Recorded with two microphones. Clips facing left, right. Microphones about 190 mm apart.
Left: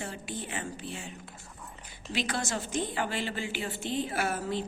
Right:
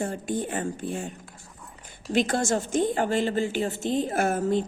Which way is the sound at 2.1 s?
50° right (ahead or behind).